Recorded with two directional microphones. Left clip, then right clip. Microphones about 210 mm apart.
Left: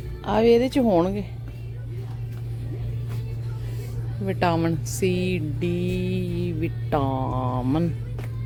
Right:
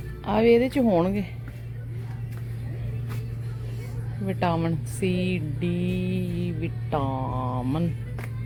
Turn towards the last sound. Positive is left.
turn(degrees=20)  # may be behind; listen again after turning